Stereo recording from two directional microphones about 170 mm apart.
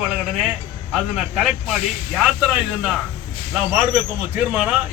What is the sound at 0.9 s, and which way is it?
Speech, centre (ahead or behind).